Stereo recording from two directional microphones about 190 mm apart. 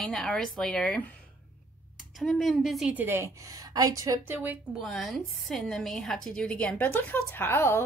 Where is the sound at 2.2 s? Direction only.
Centre (ahead or behind).